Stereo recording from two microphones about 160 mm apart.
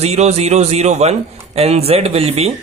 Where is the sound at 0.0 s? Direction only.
40° right (ahead or behind).